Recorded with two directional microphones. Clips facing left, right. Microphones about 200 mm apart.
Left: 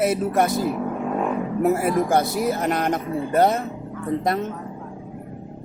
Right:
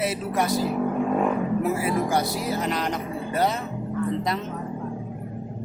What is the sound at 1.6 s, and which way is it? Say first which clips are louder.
Speech: left 4 dB; 50° left (ahead or behind).